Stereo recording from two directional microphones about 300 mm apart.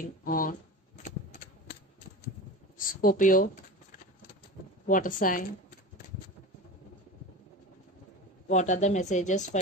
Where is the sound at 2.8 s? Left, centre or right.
Left.